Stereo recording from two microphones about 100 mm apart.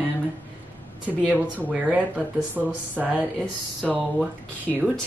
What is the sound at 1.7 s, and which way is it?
Speech, 10° right (ahead or behind).